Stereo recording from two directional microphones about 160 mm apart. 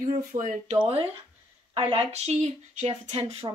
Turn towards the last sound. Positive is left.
turn(degrees=-40)  # may be behind; listen again after turning